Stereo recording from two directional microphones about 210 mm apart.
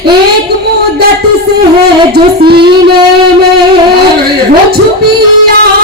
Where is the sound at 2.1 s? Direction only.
50° right (ahead or behind).